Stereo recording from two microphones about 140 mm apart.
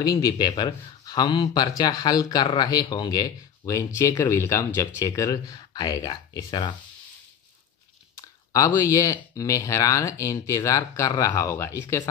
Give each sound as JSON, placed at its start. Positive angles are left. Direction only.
{"t": 0.0, "sound": "speech", "side_deg": 25}
{"t": 8.2, "sound": "speech", "side_deg": 20}